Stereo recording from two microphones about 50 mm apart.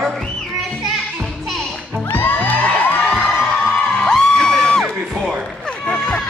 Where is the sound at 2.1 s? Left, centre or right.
Left.